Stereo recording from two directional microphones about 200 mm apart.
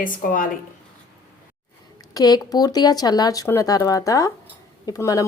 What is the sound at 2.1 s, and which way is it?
Speech, 20° left (ahead or behind).